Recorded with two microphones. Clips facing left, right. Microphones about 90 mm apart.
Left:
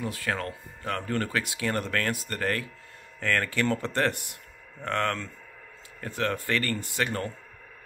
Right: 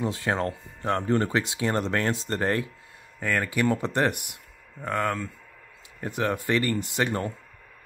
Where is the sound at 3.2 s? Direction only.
10° right (ahead or behind).